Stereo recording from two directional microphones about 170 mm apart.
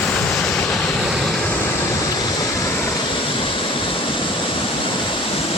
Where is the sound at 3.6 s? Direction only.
30° left (ahead or behind).